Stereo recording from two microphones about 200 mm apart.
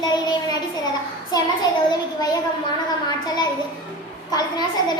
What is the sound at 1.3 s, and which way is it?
A child's voice, 20° left (ahead or behind).